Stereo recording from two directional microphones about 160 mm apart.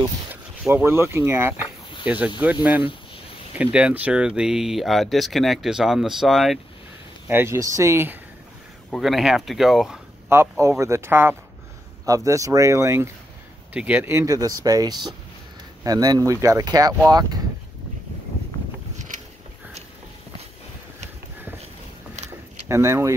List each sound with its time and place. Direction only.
0.3 s speech: 15° right (ahead or behind)
3.5 s speech: 10° right (ahead or behind)
7.2 s speech: 15° right (ahead or behind)
8.9 s speech: centre (ahead or behind)
10.6 s speech: 20° right (ahead or behind)
22.7 s speech: 15° right (ahead or behind)